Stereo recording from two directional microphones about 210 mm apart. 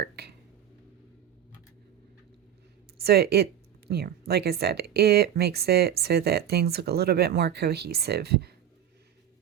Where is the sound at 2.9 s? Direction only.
50° right (ahead or behind).